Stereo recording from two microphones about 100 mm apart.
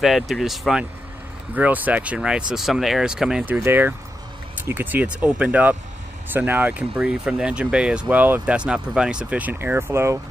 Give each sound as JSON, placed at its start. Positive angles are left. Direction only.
{"t": 0.0, "sound": "speech", "side_deg": 0}
{"t": 1.5, "sound": "speech", "side_deg": -15}
{"t": 3.4, "sound": "speech", "side_deg": -20}